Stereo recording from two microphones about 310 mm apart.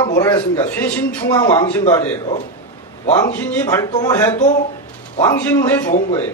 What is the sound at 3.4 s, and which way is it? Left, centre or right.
Speech, centre.